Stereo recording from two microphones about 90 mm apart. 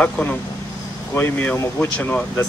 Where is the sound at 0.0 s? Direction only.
20° left (ahead or behind).